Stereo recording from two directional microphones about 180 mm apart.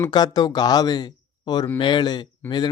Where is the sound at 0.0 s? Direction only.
25° left (ahead or behind).